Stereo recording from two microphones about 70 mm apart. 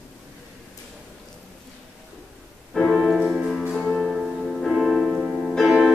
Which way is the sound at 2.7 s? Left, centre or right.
Centre.